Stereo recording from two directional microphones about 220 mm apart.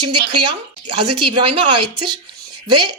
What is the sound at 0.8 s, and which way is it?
Speech, 90° right.